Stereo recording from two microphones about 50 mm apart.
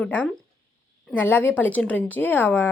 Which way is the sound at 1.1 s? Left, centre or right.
Left.